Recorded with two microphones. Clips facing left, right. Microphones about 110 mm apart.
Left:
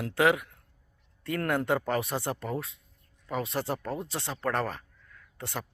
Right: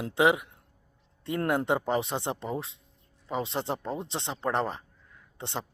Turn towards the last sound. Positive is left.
turn(degrees=-25)  # may be behind; listen again after turning